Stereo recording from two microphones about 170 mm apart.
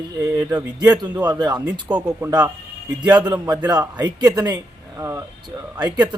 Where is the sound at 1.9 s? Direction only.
5° right (ahead or behind).